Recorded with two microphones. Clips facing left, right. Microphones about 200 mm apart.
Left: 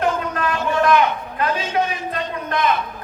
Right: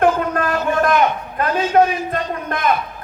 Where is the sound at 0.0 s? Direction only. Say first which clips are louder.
Right 5 dB; 50° right (ahead or behind).